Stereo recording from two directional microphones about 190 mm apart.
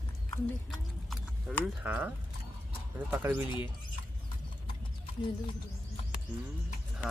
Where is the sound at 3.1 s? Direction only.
10° right (ahead or behind).